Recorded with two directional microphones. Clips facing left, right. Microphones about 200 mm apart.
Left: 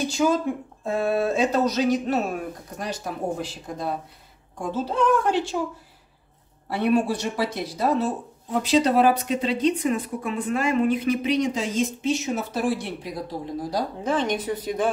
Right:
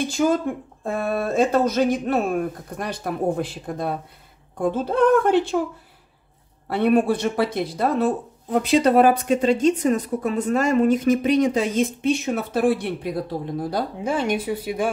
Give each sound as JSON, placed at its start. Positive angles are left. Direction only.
{"t": 0.8, "sound": "a woman's voice", "side_deg": -50}
{"t": 6.7, "sound": "a woman's voice", "side_deg": -55}
{"t": 14.0, "sound": "speech", "side_deg": -10}